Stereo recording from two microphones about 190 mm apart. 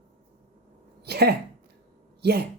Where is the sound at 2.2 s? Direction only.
60° right (ahead or behind).